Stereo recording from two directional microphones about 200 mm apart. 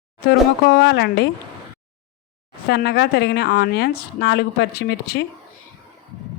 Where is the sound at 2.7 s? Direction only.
55° left (ahead or behind).